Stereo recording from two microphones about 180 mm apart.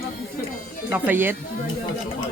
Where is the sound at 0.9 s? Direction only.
10° right (ahead or behind).